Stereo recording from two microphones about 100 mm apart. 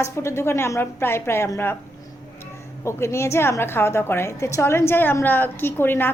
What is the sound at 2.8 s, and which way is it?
A woman's voice, 30° left (ahead or behind).